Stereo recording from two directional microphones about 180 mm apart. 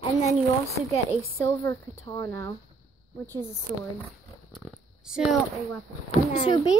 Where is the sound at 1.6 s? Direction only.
20° left (ahead or behind).